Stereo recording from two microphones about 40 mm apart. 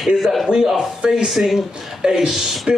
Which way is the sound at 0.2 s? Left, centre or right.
Centre.